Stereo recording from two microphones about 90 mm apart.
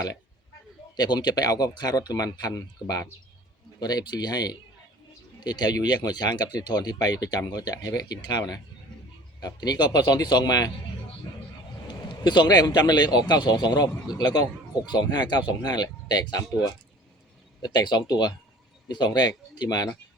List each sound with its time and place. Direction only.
0.9 s speech: 50° left (ahead or behind)
11.9 s speech: 50° left (ahead or behind)